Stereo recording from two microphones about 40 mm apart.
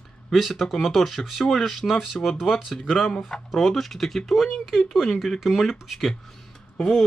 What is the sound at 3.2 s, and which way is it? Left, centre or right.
Speech, centre.